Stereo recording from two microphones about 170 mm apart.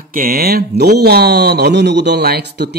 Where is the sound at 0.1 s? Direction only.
60° right (ahead or behind).